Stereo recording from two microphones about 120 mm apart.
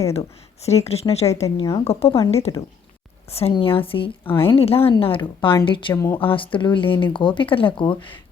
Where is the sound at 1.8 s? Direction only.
55° left (ahead or behind).